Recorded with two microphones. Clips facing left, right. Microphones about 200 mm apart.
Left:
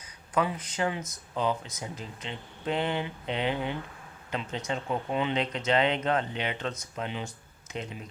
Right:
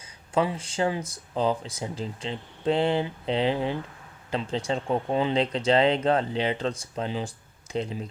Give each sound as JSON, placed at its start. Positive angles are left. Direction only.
{"t": 0.3, "sound": "speech", "side_deg": -30}